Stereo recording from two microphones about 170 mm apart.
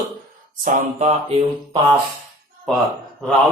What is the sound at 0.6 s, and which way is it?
Mantra, 40° right (ahead or behind).